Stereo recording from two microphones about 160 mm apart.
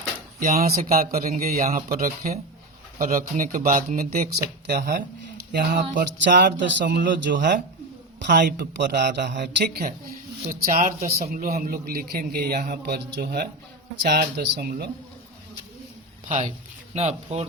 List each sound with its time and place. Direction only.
0.3 s a man's voice: 65° right (ahead or behind)
8.2 s a man's voice: 90° right
10.5 s a man's voice: 60° right (ahead or behind); by 14.8 s 75° right (ahead or behind)
16.9 s speech: 40° right (ahead or behind)